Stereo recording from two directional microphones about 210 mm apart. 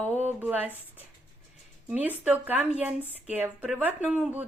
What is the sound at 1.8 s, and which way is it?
Speech, 10° right (ahead or behind).